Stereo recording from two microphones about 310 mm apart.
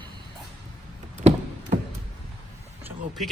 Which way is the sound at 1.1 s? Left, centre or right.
Right.